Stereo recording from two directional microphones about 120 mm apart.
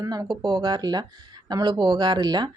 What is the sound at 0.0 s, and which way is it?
A woman's voice, 30° right (ahead or behind).